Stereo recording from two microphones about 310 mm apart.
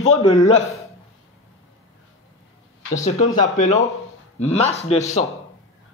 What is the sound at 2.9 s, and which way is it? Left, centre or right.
Speech, left.